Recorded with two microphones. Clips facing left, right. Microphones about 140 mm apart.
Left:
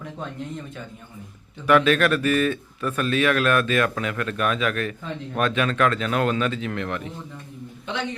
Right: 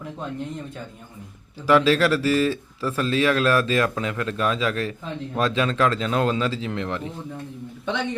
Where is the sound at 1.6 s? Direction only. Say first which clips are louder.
Even; 25° right (ahead or behind).